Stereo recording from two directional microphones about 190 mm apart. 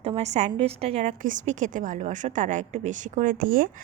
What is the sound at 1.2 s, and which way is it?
A woman's voice, 40° right (ahead or behind).